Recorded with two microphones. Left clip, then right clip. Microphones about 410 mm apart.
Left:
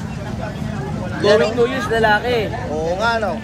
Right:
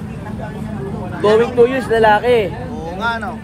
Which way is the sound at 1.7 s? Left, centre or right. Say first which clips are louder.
Right 3 dB; centre.